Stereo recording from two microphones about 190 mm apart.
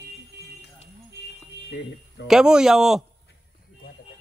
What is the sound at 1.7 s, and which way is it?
Speech, 65° left (ahead or behind).